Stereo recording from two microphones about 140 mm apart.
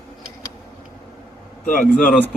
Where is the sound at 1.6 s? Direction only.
75° left (ahead or behind).